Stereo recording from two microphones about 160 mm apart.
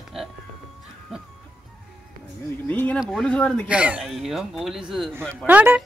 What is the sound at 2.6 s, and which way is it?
Speech, 10° left (ahead or behind).